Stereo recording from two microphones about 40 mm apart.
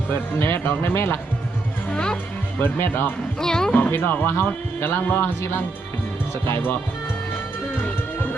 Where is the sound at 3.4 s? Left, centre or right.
Centre.